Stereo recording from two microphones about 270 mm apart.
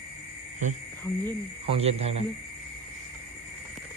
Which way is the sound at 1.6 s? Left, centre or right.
Right.